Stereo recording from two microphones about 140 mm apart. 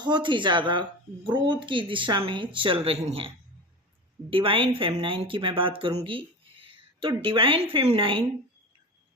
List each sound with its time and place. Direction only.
0.0 s speech: 35° right (ahead or behind)
6.0 s a sound: 40° right (ahead or behind)
7.2 s speech: 40° right (ahead or behind)